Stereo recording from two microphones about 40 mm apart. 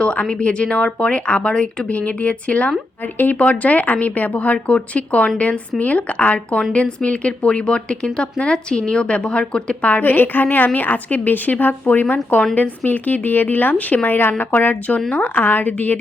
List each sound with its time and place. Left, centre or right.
0.0 s a woman's voice: left
1.9 s speech: left
3.0 s a woman's voice: left
10.0 s a woman's voice: left